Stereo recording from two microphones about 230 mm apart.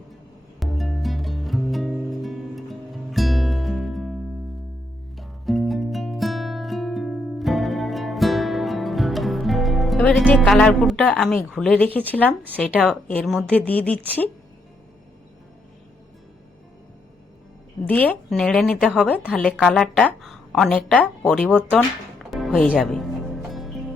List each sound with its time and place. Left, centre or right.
0.6 s music: centre
5.1 s music: centre
11.4 s a woman's voice: centre
17.8 s a woman's voice: centre
23.5 s music: centre